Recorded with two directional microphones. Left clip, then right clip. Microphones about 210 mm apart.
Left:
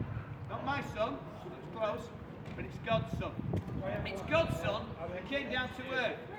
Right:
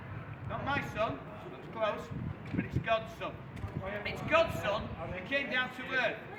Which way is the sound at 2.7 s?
10° right (ahead or behind).